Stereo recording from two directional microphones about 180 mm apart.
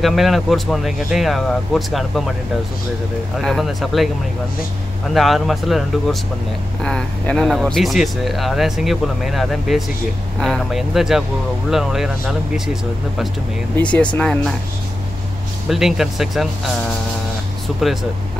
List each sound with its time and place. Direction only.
0.0 s a man's voice: centre (ahead or behind)
3.3 s a man's voice: centre (ahead or behind)
5.1 s a man's voice: centre (ahead or behind)
13.7 s speech: 10° left (ahead or behind)
15.7 s a man's voice: centre (ahead or behind)